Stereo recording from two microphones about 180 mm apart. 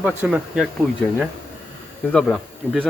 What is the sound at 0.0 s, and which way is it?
Speech, 10° right (ahead or behind).